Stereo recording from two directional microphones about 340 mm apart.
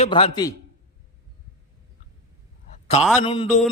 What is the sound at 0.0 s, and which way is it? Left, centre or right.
Speech, centre.